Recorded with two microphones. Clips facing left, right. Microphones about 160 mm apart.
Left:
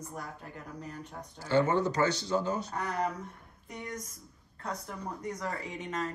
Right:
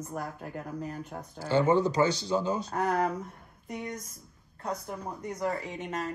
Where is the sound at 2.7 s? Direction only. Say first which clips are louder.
Right 5 dB; 45° right (ahead or behind).